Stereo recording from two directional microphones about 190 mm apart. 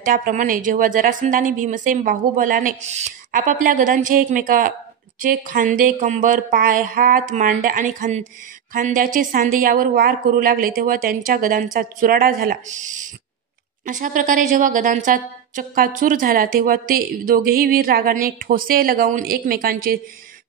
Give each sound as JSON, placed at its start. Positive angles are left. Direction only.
{"t": 0.0, "sound": "a woman's voice", "side_deg": -45}